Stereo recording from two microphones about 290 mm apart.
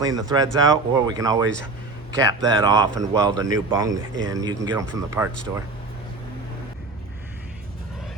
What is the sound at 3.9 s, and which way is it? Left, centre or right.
Speech, right.